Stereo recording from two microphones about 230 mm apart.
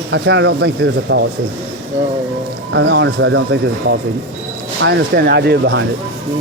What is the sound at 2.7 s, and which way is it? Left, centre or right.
Speech, right.